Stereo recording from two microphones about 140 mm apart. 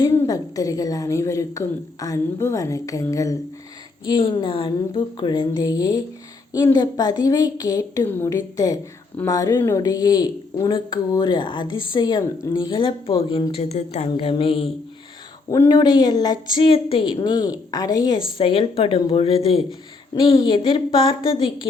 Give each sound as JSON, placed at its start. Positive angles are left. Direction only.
{"t": 0.0, "sound": "a woman's voice", "side_deg": 20}
{"t": 15.4, "sound": "a woman's voice", "side_deg": 25}